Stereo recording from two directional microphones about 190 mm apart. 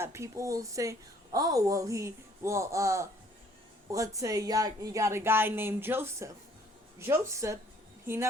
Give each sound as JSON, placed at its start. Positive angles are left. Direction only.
{"t": 0.0, "sound": "a woman's voice", "side_deg": -15}